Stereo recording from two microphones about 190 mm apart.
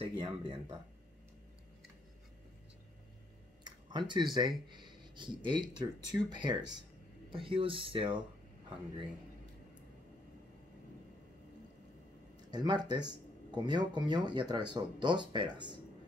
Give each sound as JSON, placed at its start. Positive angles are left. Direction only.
{"t": 0.0, "sound": "speech", "side_deg": -25}
{"t": 3.6, "sound": "speech", "side_deg": -25}
{"t": 12.4, "sound": "speech", "side_deg": -20}